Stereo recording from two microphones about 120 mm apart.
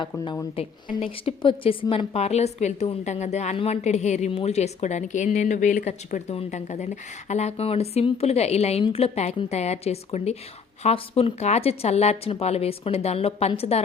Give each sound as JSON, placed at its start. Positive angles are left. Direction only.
{"t": 0.5, "sound": "a woman's voice", "side_deg": 50}
{"t": 3.1, "sound": "a woman's voice", "side_deg": 70}
{"t": 4.3, "sound": "a woman's voice", "side_deg": 60}